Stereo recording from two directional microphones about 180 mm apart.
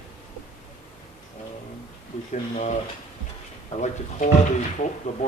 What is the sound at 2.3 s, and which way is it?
Speech, 40° left (ahead or behind).